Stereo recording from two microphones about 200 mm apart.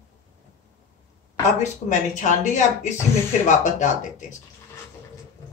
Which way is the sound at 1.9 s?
40° left (ahead or behind).